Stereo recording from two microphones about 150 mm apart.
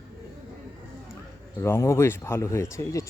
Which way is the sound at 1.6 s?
20° left (ahead or behind).